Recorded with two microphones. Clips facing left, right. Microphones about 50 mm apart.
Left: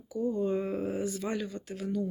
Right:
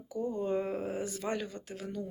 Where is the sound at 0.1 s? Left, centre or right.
Right.